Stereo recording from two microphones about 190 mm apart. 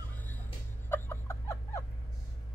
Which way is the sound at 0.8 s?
10° left (ahead or behind).